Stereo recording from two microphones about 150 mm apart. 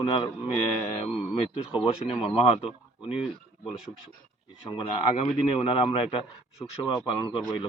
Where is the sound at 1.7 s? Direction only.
40° left (ahead or behind).